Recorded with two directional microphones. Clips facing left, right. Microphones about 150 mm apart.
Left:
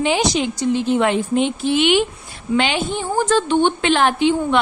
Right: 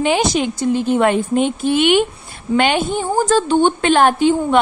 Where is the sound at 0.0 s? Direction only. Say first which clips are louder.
Right 2 dB; 50° right (ahead or behind).